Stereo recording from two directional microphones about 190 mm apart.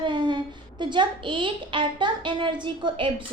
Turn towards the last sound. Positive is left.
turn(degrees=-25)  # may be behind; listen again after turning